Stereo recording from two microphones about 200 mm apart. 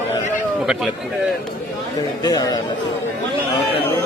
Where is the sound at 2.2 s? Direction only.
20° left (ahead or behind).